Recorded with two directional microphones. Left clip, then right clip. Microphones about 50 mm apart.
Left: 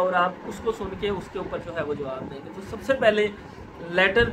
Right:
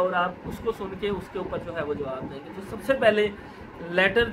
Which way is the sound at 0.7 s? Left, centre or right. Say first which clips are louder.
Left 1 dB; right.